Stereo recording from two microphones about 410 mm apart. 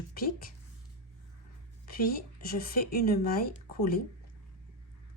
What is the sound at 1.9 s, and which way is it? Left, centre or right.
Speech, left.